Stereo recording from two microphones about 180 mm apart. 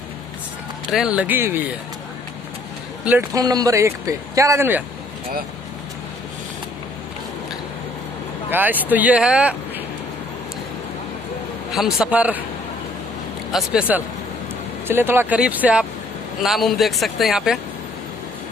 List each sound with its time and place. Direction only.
0.9 s speech: 5° right (ahead or behind)
3.1 s speech: 15° right (ahead or behind)
8.5 s speech: 10° right (ahead or behind)
11.7 s speech: centre (ahead or behind)
13.5 s speech: 5° right (ahead or behind)